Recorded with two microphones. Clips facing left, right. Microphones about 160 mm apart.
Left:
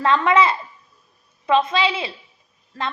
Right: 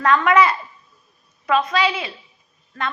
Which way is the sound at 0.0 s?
25° left (ahead or behind).